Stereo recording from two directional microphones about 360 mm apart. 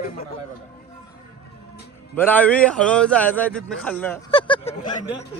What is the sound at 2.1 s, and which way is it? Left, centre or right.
A man's voice, centre.